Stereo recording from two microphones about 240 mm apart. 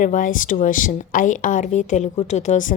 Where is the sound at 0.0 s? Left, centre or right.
Left.